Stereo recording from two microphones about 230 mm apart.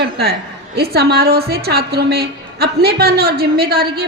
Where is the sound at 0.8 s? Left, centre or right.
Right.